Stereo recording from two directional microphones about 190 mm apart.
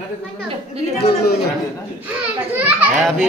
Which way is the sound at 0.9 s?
55° left (ahead or behind).